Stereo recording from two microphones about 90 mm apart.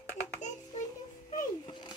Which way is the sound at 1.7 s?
55° left (ahead or behind).